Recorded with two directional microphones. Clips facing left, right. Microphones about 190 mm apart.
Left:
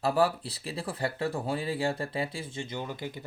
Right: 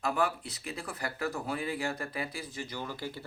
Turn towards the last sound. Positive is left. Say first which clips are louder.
# left 2 dB
turn(degrees=20)  # may be behind; listen again after turning